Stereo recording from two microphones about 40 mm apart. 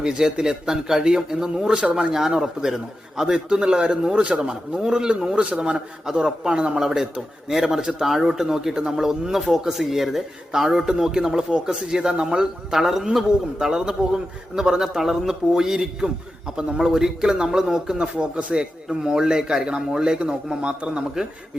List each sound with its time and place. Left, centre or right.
0.0 s a man's voice: centre
2.1 s a man's voice: centre; by 5.8 s right
6.1 s a man's voice: centre
6.8 s a man's voice: centre
8.0 s a man's voice: centre
17.9 s a man's voice: right